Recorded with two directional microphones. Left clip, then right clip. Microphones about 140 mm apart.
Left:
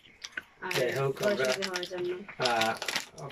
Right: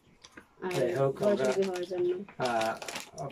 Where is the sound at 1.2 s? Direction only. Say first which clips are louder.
Even; 20° right (ahead or behind).